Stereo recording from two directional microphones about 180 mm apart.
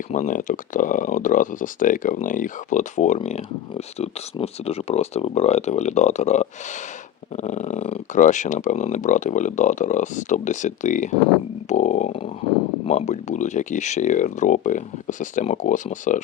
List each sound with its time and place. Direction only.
0.1 s speech: 45° left (ahead or behind)